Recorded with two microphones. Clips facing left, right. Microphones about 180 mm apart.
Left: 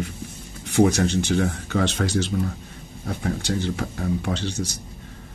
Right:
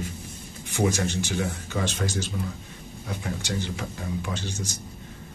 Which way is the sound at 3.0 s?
55° left (ahead or behind).